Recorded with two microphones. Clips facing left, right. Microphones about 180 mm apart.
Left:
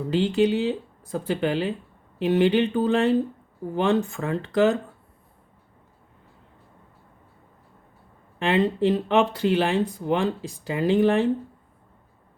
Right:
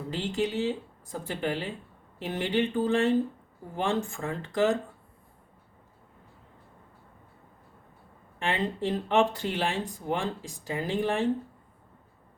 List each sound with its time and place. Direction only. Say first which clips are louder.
0.1 s speech: left 9 dB; 70° left (ahead or behind)
8.4 s speech: left 8 dB; 70° left (ahead or behind)